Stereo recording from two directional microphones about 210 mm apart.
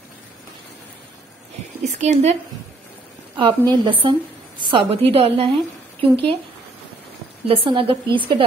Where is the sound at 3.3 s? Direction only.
20° right (ahead or behind).